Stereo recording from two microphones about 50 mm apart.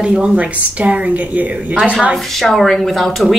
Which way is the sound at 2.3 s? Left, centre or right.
Centre.